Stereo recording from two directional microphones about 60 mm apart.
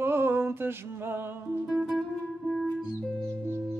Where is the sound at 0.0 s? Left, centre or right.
Right.